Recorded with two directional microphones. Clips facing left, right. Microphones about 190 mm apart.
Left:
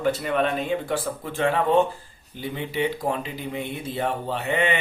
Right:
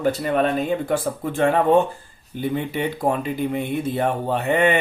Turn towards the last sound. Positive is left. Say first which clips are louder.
# right 5 dB
turn(degrees=-50)  # may be behind; listen again after turning